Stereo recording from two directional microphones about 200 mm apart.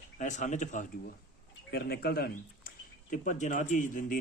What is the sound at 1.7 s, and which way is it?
Speech, 55° left (ahead or behind).